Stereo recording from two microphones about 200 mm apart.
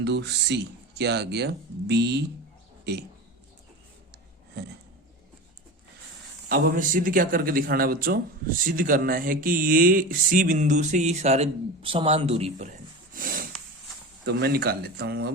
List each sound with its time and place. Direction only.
0.0 s speech: 60° right (ahead or behind)
6.5 s a man's voice: 40° right (ahead or behind)
13.1 s snort: 45° right (ahead or behind)
14.3 s a man's voice: 55° right (ahead or behind)